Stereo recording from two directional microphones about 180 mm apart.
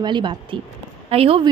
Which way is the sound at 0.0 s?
25° right (ahead or behind).